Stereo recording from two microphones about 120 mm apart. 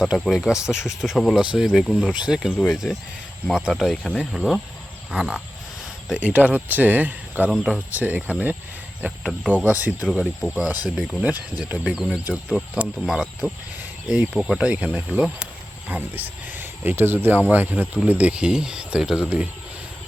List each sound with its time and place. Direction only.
0.0 s speech: centre (ahead or behind)
6.1 s speech: 10° right (ahead or behind)
9.7 s speech: 15° right (ahead or behind)
10.1 s speech: centre (ahead or behind)
10.5 s speech: 15° right (ahead or behind)
10.8 s speech: 5° right (ahead or behind)